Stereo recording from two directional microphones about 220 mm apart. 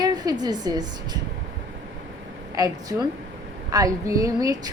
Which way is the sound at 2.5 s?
15° right (ahead or behind).